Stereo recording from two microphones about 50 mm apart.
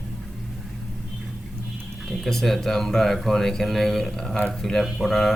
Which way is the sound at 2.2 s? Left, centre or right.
Centre.